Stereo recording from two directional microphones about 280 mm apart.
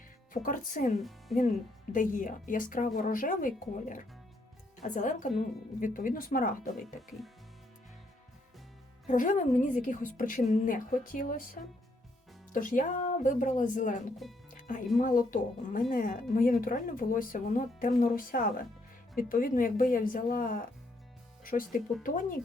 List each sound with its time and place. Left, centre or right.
0.4 s a woman's voice: left
0.9 s speech: centre
1.9 s a woman's voice: left
9.0 s a woman's voice: left
14.5 s music: left
14.9 s a woman's voice: left